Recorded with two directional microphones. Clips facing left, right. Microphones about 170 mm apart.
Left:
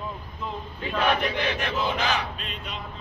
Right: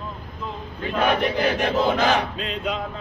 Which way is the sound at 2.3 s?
90° right.